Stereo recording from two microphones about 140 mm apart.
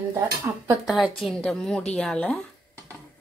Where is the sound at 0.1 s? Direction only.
20° right (ahead or behind).